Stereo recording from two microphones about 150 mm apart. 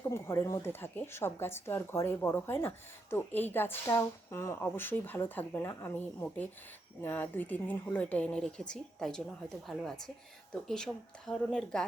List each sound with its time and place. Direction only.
0.0 s speech: 15° left (ahead or behind)